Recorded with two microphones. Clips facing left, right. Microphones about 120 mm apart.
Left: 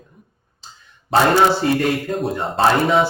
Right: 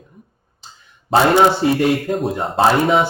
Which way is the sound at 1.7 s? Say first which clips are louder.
Right 3 dB; centre (ahead or behind).